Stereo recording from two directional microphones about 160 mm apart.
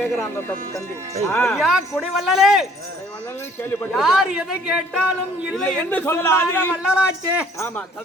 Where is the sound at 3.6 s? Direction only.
15° left (ahead or behind).